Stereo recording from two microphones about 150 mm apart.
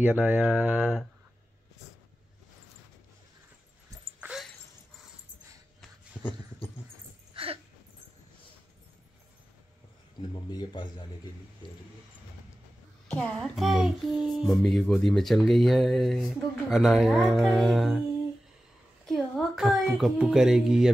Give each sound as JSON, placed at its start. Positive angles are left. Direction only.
{"t": 0.0, "sound": "mantra", "side_deg": -10}
{"t": 4.2, "sound": "dog", "side_deg": -5}
{"t": 7.3, "sound": "a sound", "side_deg": -40}
{"t": 10.5, "sound": "a man's voice", "side_deg": 30}
{"t": 13.1, "sound": "speech", "side_deg": 5}
{"t": 19.0, "sound": "speech", "side_deg": 0}